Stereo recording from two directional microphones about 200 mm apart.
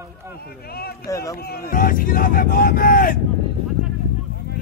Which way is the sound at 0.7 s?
50° left (ahead or behind).